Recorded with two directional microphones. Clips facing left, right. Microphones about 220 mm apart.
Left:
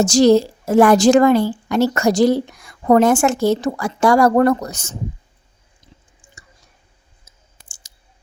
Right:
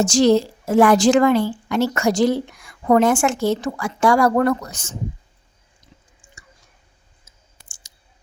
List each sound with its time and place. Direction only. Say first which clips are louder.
0.0 s a woman's voice: left 3 dB; 40° left (ahead or behind)
6.2 s chewing: left 2 dB; 40° left (ahead or behind)
7.3 s clicking: left 2 dB; 30° left (ahead or behind)